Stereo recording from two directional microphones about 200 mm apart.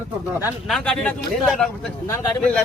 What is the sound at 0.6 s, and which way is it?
Speech, 5° left (ahead or behind).